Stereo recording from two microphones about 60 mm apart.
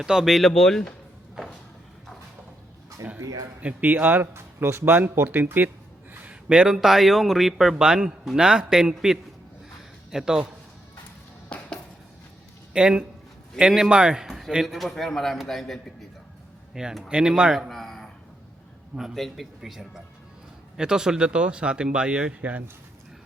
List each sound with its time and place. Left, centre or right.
0.0 s a man's voice: centre
3.2 s speech: right
3.6 s speech: right
4.9 s speech: right
6.5 s a man's voice: centre
11.4 s music: centre
12.7 s a man's voice: centre
16.7 s a man's voice: centre
17.7 s a sound: centre
19.1 s a man's voice: centre; by 22.6 s right